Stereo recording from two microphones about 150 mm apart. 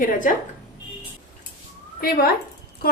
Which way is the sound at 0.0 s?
60° left (ahead or behind).